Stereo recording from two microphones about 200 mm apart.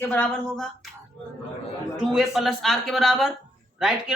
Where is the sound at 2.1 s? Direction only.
Centre (ahead or behind).